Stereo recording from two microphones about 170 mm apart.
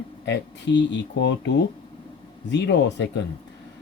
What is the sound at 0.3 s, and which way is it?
Speech, 90° left.